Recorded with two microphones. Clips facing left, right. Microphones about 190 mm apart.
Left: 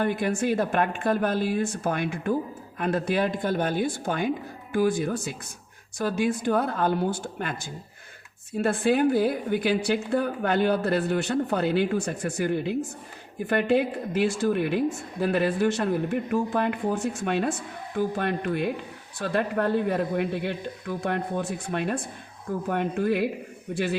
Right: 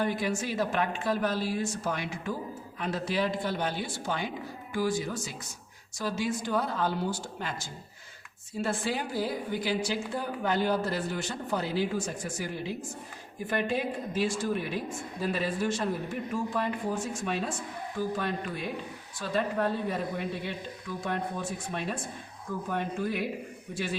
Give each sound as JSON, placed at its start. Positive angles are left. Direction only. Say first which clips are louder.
{"t": 0.0, "sound": "a woman's voice", "louder": "left 5 dB", "side_deg": 55}